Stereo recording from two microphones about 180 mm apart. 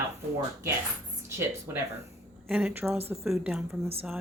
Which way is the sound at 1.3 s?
15° right (ahead or behind).